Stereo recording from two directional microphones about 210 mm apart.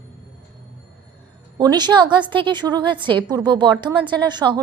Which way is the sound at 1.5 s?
20° right (ahead or behind).